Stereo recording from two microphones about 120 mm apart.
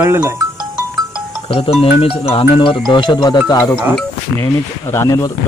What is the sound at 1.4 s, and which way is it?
A man's voice, 50° left (ahead or behind).